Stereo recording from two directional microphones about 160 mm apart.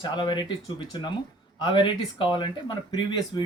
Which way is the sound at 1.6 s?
30° left (ahead or behind).